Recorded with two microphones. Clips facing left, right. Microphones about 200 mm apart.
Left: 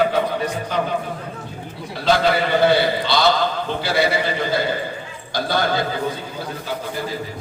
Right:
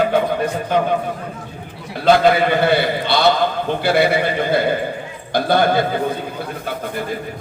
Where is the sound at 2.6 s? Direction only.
55° right (ahead or behind).